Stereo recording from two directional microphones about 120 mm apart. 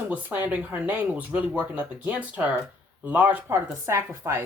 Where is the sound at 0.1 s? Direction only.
10° right (ahead or behind).